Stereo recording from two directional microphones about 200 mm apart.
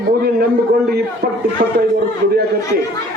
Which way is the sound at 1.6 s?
50° right (ahead or behind).